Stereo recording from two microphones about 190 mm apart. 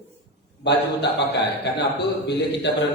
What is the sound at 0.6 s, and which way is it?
A man's voice, 65° left (ahead or behind).